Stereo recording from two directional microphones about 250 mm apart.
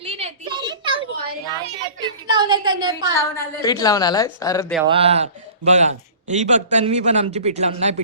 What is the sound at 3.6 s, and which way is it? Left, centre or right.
A woman's voice, centre.